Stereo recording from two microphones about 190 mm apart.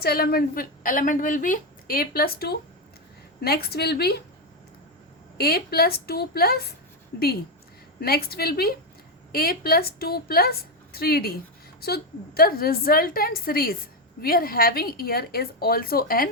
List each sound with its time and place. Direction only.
0.0 s a woman's voice: 55° left (ahead or behind)
5.4 s a woman's voice: 55° left (ahead or behind)